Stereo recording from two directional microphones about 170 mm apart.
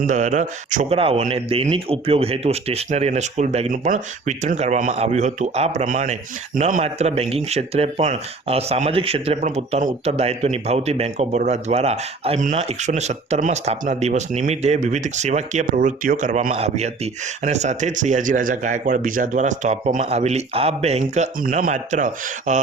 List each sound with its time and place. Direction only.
0.0 s speech: 45° right (ahead or behind)
0.9 s speech: 35° right (ahead or behind); by 16.6 s 50° right (ahead or behind)
16.6 s speech: 40° right (ahead or behind)